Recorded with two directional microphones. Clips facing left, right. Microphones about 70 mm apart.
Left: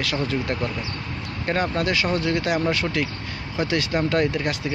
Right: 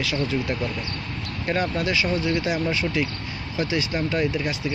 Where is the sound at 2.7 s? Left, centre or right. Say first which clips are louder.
Left 1 dB; left.